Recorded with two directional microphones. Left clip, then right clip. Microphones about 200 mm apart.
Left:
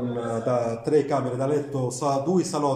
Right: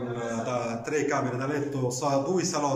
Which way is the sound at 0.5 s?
35° left (ahead or behind).